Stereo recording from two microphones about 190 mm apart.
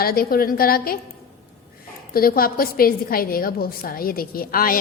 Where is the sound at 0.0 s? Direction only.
50° left (ahead or behind).